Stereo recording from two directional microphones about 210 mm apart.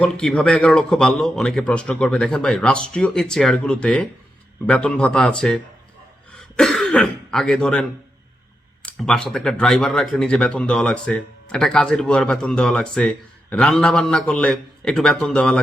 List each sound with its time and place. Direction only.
0.0 s speech: 5° left (ahead or behind)
6.6 s speech: centre (ahead or behind)